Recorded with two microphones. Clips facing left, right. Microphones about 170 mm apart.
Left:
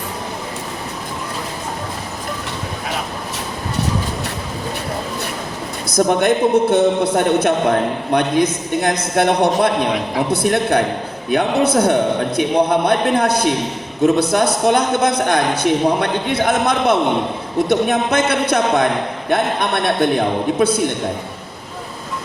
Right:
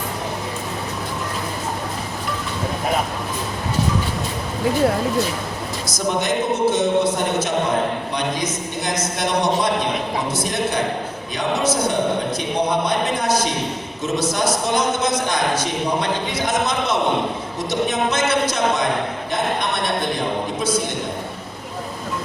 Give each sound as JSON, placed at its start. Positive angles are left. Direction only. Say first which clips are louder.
{"t": 6.1, "sound": "a man's voice", "louder": "left 4 dB", "side_deg": 60}